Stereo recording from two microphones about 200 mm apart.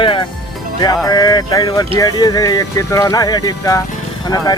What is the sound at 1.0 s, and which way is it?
Speech, 20° left (ahead or behind).